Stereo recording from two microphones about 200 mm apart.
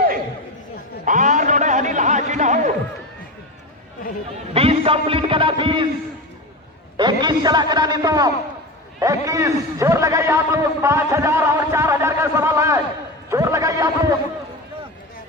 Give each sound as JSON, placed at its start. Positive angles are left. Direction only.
{"t": 1.0, "sound": "a man's voice", "side_deg": -40}
{"t": 4.5, "sound": "a man's voice", "side_deg": -30}
{"t": 6.9, "sound": "a man's voice", "side_deg": -20}